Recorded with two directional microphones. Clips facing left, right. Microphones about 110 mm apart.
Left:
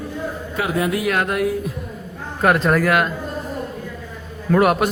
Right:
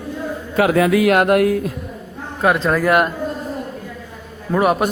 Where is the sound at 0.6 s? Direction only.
90° right.